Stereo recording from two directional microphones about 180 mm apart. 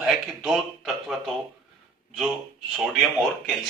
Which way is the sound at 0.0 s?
5° right (ahead or behind).